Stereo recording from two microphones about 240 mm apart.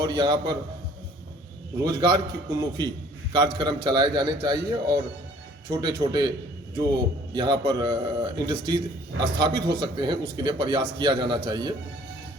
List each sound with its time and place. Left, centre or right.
0.0 s a man's voice: centre
1.8 s a man's voice: centre
9.2 s a man's voice: right
9.6 s a man's voice: centre